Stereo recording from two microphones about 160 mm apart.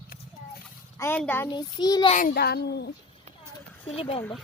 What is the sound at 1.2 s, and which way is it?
Speech, 10° left (ahead or behind).